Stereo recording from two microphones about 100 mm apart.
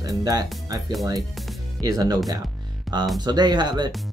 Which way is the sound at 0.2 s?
40° right (ahead or behind).